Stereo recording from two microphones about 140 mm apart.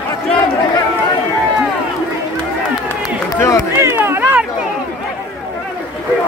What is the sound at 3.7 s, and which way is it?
Run, 15° right (ahead or behind).